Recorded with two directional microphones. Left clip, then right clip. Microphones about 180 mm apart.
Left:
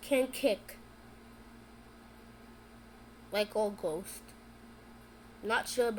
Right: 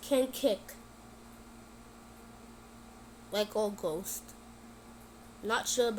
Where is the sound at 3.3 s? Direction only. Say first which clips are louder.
Even; 10° right (ahead or behind).